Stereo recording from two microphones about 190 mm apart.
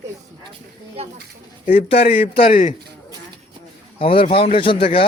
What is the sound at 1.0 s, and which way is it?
Speech, 30° right (ahead or behind).